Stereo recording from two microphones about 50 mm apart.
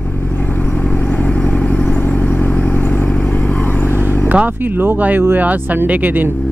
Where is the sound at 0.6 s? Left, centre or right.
Left.